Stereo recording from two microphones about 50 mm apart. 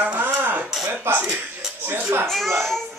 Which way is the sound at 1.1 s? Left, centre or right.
Right.